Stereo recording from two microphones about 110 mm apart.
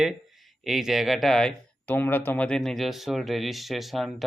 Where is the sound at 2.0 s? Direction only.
20° left (ahead or behind).